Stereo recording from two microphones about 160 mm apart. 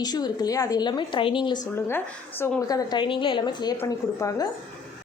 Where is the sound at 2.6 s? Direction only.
20° left (ahead or behind).